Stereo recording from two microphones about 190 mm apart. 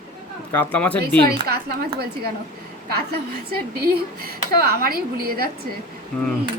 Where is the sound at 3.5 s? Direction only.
55° right (ahead or behind).